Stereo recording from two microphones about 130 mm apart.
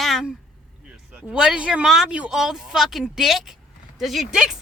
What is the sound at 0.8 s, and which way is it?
Speech, 10° right (ahead or behind).